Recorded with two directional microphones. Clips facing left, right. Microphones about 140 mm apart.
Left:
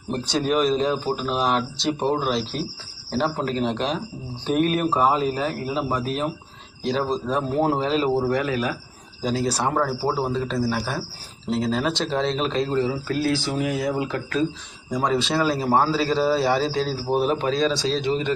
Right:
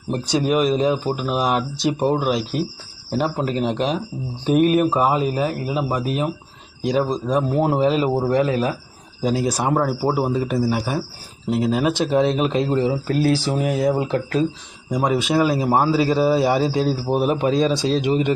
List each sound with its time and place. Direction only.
0.3 s a man's voice: 5° right (ahead or behind)
7.3 s a man's voice: 10° right (ahead or behind); by 8.7 s 30° right (ahead or behind)
9.2 s a man's voice: 15° right (ahead or behind)
13.1 s speech: 30° right (ahead or behind)
14.8 s a man's voice: 15° right (ahead or behind)